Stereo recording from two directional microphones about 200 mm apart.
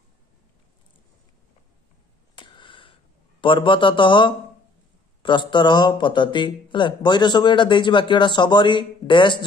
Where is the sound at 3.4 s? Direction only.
25° left (ahead or behind).